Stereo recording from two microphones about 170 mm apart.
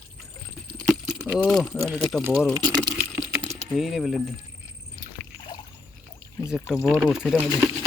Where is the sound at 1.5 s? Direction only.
Centre (ahead or behind).